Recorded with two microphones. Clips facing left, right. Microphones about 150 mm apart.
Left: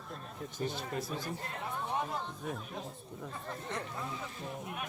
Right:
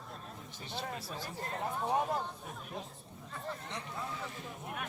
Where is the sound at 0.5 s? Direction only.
45° left (ahead or behind).